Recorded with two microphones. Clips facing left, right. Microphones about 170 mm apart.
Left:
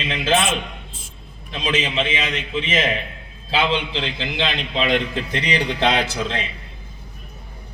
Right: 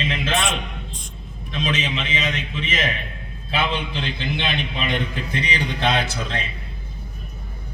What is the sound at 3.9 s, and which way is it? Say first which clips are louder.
A man's voice: left 1 dB; 90° left.